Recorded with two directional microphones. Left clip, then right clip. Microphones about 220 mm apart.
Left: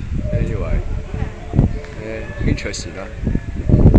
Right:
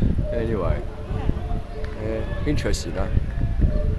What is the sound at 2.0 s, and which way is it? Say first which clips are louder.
Speech: left 2 dB; 15° right (ahead or behind).